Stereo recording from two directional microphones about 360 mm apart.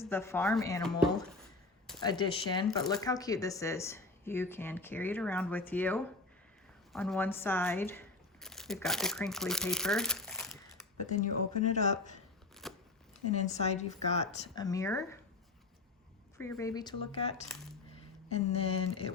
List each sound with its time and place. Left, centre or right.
0.0 s speech: centre
2.0 s speech: centre
11.0 s speech: left
12.6 s shuffling cards: centre
13.4 s speech: centre
16.4 s speech: centre